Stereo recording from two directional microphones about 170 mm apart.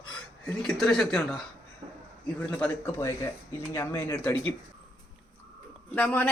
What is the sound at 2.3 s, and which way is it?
Speech, 5° left (ahead or behind).